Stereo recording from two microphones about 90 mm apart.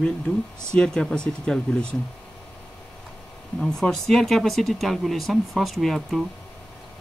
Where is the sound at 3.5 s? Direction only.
5° left (ahead or behind).